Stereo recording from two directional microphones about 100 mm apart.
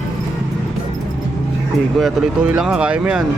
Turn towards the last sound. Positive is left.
turn(degrees=-10)  # may be behind; listen again after turning